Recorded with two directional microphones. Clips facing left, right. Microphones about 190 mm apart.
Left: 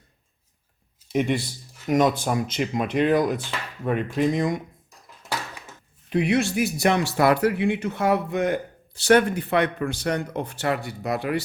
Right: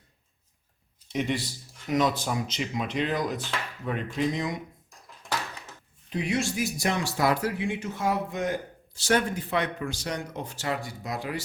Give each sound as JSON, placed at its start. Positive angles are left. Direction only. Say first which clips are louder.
{"t": 1.1, "sound": "speech", "louder": "left 5 dB", "side_deg": 55}
{"t": 6.1, "sound": "speech", "louder": "left 6 dB", "side_deg": 65}